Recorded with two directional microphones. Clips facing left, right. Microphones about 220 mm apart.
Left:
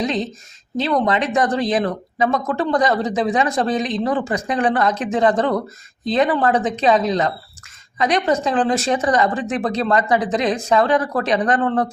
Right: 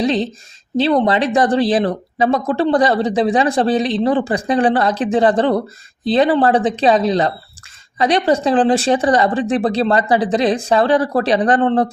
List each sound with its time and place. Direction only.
0.0 s speech: 30° right (ahead or behind)